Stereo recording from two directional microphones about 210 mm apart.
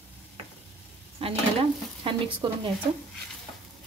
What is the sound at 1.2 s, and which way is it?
Dishes, 25° right (ahead or behind).